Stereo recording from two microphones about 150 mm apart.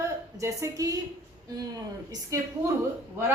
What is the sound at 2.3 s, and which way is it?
Speech, 20° right (ahead or behind).